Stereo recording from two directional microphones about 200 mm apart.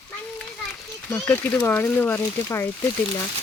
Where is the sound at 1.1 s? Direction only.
15° left (ahead or behind).